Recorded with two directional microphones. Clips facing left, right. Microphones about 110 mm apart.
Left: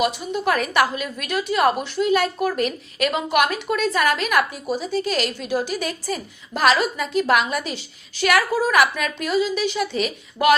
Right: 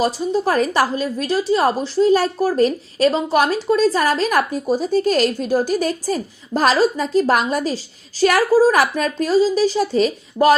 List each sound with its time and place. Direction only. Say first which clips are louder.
0.0 s a woman's voice: right 4 dB; 35° right (ahead or behind)